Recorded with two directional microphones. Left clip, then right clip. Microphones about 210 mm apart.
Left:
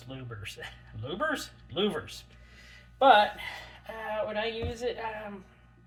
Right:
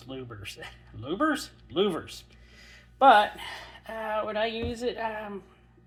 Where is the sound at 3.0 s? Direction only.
35° right (ahead or behind).